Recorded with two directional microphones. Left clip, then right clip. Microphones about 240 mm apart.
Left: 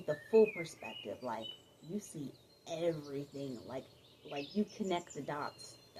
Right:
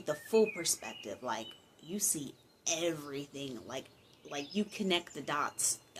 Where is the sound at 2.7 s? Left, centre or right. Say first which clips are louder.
Right 2 dB; right.